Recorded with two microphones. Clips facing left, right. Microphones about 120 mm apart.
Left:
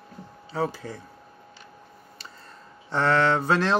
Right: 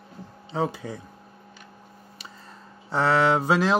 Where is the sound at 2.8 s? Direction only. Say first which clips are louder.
Right 1 dB; 10° right (ahead or behind).